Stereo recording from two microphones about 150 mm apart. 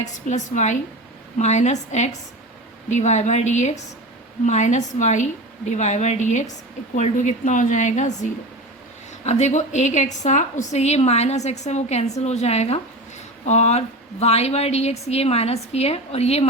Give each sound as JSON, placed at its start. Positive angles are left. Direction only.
{"t": 0.0, "sound": "a woman's voice", "side_deg": 50}